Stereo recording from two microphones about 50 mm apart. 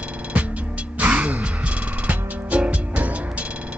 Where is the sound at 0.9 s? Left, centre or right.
Right.